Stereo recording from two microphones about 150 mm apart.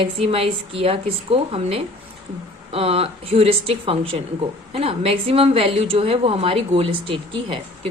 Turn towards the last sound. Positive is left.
turn(degrees=-35)  # may be behind; listen again after turning